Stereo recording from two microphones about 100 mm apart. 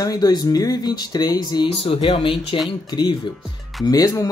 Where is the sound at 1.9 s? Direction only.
65° left (ahead or behind).